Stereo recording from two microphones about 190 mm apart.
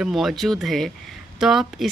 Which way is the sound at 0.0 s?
Centre (ahead or behind).